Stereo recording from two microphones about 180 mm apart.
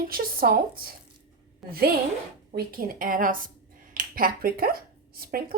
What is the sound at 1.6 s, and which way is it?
Speech, centre (ahead or behind).